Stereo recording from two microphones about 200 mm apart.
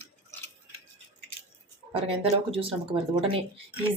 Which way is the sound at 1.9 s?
30° right (ahead or behind).